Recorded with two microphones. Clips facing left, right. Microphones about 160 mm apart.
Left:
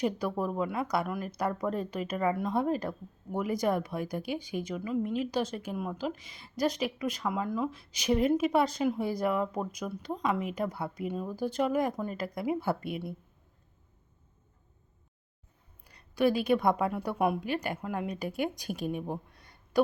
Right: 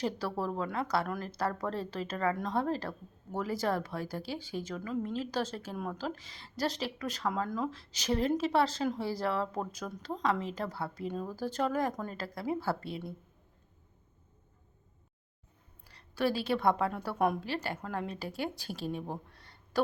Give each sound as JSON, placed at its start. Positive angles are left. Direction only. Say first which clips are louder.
{"t": 0.0, "sound": "speech", "louder": "left 3 dB", "side_deg": 15}
{"t": 16.1, "sound": "a woman's voice", "louder": "left 5 dB", "side_deg": 15}